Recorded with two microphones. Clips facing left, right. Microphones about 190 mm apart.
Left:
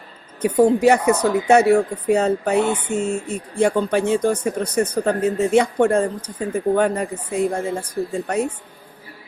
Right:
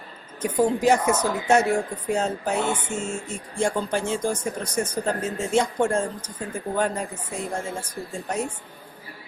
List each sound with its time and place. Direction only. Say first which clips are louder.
0.4 s speech: left 6 dB; 65° left (ahead or behind)